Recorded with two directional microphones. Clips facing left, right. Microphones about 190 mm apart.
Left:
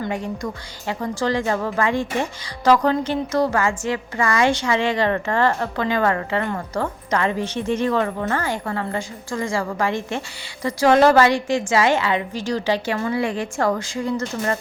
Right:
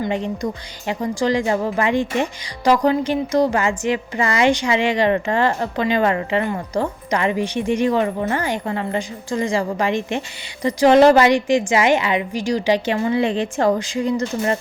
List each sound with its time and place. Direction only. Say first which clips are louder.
0.0 s a woman's voice: right 3 dB; 20° right (ahead or behind)